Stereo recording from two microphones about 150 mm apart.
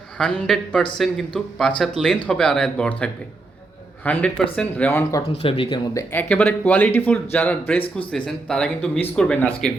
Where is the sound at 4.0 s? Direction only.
10° left (ahead or behind).